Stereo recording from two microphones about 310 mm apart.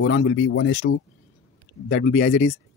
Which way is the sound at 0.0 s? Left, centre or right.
Left.